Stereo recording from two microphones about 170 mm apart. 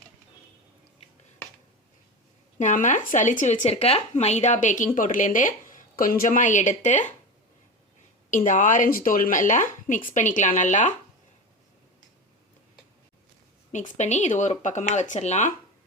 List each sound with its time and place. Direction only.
2.6 s speech: 50° left (ahead or behind)
8.3 s speech: 50° left (ahead or behind)
13.7 s speech: 45° left (ahead or behind)